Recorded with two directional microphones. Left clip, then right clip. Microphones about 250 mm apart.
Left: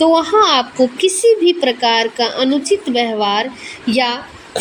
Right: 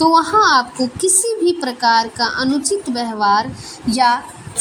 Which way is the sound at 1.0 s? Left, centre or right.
Right.